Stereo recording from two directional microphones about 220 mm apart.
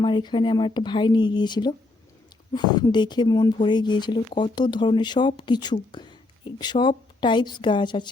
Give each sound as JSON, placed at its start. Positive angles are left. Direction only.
{"t": 0.0, "sound": "speech", "side_deg": 20}